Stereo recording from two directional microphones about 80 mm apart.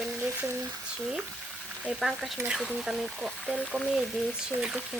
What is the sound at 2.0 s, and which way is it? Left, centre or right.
Speech, centre.